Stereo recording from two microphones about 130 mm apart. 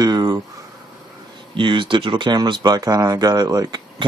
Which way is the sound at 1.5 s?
40° right (ahead or behind).